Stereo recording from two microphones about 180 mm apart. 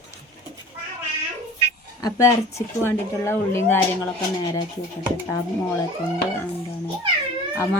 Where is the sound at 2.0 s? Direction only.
15° left (ahead or behind).